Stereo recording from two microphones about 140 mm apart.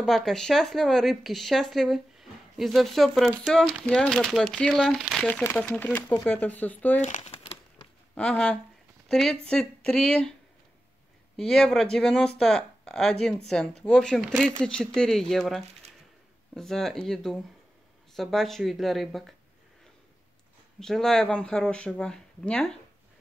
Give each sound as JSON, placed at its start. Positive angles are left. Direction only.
{"t": 0.0, "sound": "speech", "side_deg": 0}
{"t": 5.3, "sound": "speech", "side_deg": 15}
{"t": 7.2, "sound": "crumpling", "side_deg": 40}
{"t": 8.1, "sound": "speech", "side_deg": 10}
{"t": 11.3, "sound": "speech", "side_deg": 5}
{"t": 20.8, "sound": "speech", "side_deg": 5}